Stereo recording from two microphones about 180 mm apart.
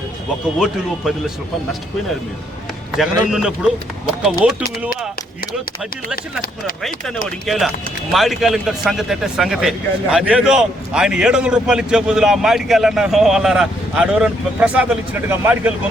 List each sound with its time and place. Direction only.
3.0 s a man's voice: 5° right (ahead or behind)
7.3 s a man's voice: centre (ahead or behind)